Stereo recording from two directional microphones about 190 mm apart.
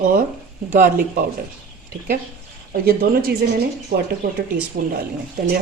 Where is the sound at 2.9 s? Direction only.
50° right (ahead or behind).